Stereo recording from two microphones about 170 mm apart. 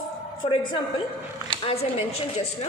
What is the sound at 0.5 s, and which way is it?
A woman's voice, 30° left (ahead or behind).